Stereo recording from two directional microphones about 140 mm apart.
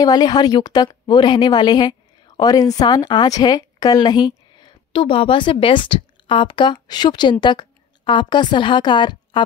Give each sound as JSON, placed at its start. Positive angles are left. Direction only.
{"t": 0.0, "sound": "a woman's voice", "side_deg": 30}